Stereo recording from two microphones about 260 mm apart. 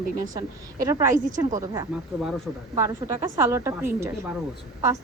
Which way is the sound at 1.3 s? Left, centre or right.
Right.